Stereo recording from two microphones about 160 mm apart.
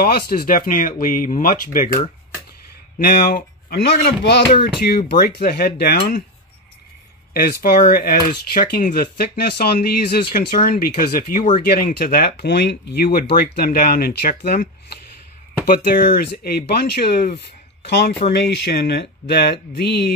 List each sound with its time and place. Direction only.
0.0 s speech: 75° left (ahead or behind)
3.0 s speech: 70° left (ahead or behind); by 4.4 s 90° left
4.8 s speech: 80° left
7.3 s speech: 70° left (ahead or behind)
9.2 s speech: 80° left